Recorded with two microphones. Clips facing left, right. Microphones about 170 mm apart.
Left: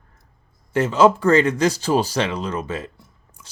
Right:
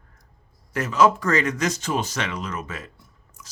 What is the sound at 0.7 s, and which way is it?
Speech, 30° left (ahead or behind).